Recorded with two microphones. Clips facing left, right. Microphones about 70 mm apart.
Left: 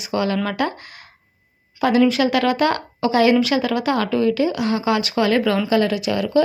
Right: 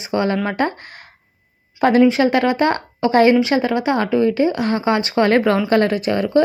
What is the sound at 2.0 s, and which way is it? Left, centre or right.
A woman's voice, right.